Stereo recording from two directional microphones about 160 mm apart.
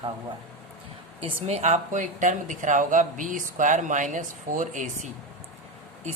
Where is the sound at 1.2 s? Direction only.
40° right (ahead or behind).